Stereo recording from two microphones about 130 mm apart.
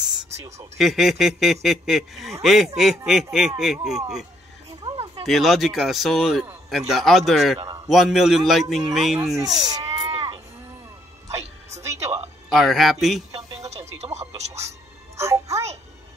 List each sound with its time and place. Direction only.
0.0 s a sound: 5° right (ahead or behind)
0.7 s a man's voice: centre (ahead or behind)
5.2 s a man's voice: centre (ahead or behind)
7.6 s a sound: 25° right (ahead or behind)
7.9 s a man's voice: centre (ahead or behind)
9.6 s a sound: 35° right (ahead or behind)
11.2 s music: 25° right (ahead or behind)
12.5 s a man's voice: centre (ahead or behind)
13.4 s music: 25° right (ahead or behind)
13.7 s music: 55° right (ahead or behind)
14.3 s speech: 55° right (ahead or behind)
15.1 s a child's voice: 25° right (ahead or behind)